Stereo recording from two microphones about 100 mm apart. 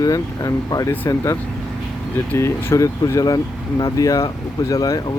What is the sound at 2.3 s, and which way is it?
Speech, 25° left (ahead or behind).